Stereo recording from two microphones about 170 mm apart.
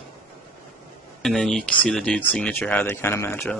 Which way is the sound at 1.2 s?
Centre (ahead or behind).